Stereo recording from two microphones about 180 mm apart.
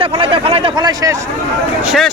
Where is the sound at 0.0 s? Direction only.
30° right (ahead or behind).